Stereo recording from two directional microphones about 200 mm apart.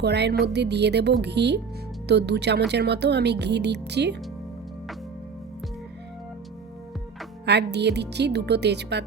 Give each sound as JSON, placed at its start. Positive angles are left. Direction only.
{"t": 0.0, "sound": "speech", "side_deg": -55}
{"t": 7.4, "sound": "speech", "side_deg": -60}